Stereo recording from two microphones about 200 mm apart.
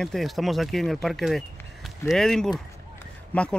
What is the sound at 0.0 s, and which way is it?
Speech, centre (ahead or behind).